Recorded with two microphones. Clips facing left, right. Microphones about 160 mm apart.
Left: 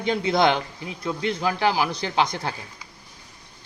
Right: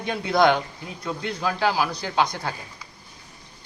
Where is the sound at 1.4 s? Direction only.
20° left (ahead or behind).